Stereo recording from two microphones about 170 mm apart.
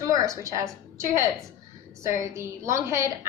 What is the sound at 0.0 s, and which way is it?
A woman's voice, 20° right (ahead or behind).